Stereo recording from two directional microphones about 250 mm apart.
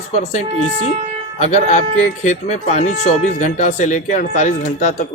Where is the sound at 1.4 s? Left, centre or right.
Left.